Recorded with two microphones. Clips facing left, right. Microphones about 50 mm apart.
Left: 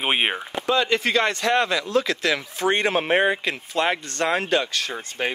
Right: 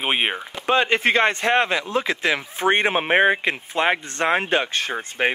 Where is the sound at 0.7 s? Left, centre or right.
Right.